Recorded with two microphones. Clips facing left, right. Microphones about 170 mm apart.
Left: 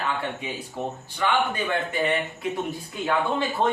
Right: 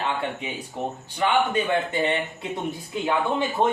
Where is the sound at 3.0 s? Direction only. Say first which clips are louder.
Even; 15° right (ahead or behind).